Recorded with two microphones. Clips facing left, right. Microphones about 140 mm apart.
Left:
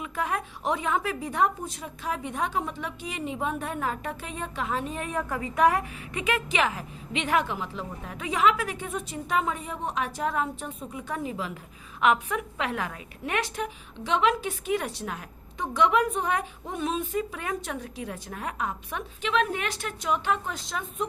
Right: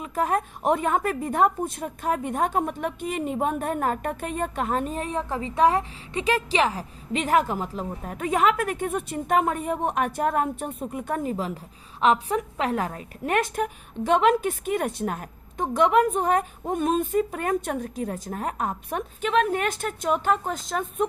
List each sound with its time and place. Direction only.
0.0 s a woman's voice: 45° right (ahead or behind)
5.0 s a woman's voice: 25° right (ahead or behind); by 21.1 s 45° right (ahead or behind)